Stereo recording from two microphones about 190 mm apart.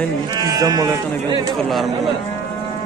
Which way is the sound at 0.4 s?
20° right (ahead or behind).